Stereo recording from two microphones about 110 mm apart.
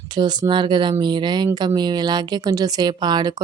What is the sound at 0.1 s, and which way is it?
A woman's voice, 40° right (ahead or behind).